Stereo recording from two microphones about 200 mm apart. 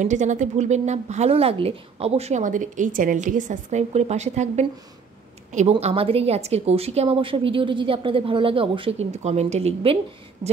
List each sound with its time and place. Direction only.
0.0 s a woman's voice: 35° right (ahead or behind)